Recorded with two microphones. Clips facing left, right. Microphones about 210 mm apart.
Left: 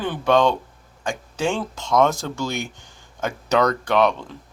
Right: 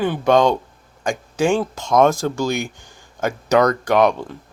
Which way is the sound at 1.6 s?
45° right (ahead or behind).